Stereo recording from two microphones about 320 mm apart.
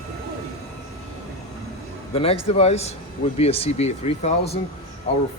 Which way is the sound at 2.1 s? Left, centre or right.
Centre.